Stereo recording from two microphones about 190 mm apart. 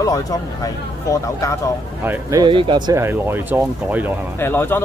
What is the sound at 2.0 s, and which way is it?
Speech, 15° right (ahead or behind).